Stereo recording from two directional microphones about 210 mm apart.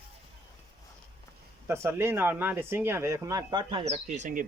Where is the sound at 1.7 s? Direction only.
10° right (ahead or behind).